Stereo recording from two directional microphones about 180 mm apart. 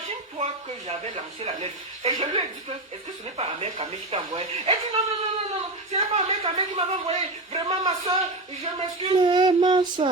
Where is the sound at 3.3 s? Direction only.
30° right (ahead or behind).